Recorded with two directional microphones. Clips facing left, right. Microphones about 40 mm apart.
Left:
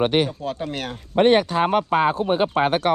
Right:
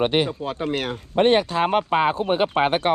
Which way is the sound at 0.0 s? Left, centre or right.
Left.